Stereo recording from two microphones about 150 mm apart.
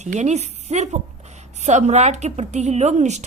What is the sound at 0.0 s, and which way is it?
A woman's voice, 50° right (ahead or behind).